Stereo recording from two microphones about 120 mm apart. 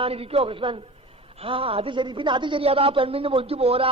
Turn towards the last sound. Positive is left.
turn(degrees=-55)  # may be behind; listen again after turning